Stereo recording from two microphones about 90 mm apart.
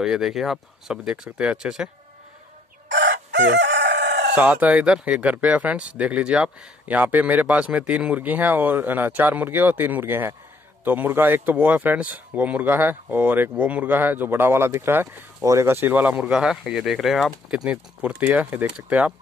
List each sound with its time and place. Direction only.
0.0 s speech: 5° right (ahead or behind)
4.4 s speech: 20° right (ahead or behind)
16.3 s speech: 10° right (ahead or behind)